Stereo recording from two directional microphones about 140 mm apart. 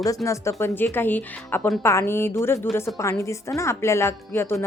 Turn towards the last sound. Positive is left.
turn(degrees=20)  # may be behind; listen again after turning